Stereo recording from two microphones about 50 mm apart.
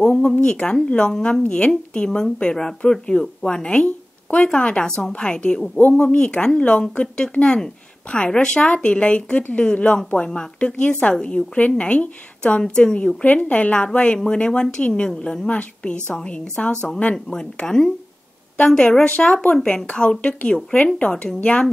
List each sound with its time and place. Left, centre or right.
0.0 s a woman's voice: centre
2.0 s a woman's voice: centre
19.0 s a woman's voice: left
19.9 s a woman's voice: left
21.1 s a woman's voice: centre